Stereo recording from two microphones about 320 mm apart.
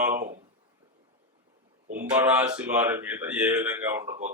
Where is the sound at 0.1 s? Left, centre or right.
Right.